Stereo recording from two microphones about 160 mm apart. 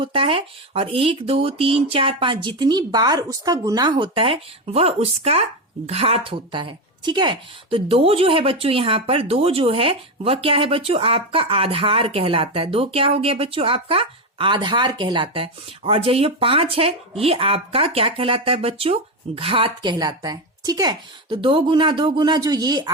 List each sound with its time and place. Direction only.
0.0 s speech: 35° right (ahead or behind)